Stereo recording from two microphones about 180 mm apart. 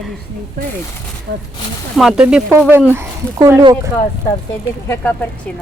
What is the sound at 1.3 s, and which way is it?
Speech, 65° right (ahead or behind).